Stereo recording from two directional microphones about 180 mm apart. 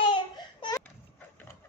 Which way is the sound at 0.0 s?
25° left (ahead or behind).